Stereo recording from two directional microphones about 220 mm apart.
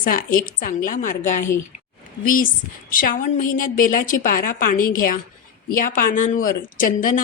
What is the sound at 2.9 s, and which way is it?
Speech, 40° left (ahead or behind).